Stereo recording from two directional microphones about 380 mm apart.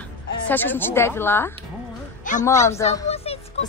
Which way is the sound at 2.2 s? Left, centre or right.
Centre.